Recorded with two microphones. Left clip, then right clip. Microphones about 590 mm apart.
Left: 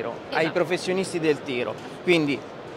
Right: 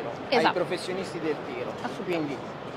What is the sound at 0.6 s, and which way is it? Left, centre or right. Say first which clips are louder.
Speech: left 5 dB; left.